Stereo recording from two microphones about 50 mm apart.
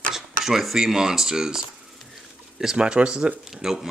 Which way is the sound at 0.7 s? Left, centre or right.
Centre.